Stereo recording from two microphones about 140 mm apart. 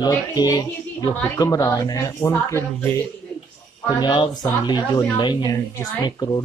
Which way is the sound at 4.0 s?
30° left (ahead or behind).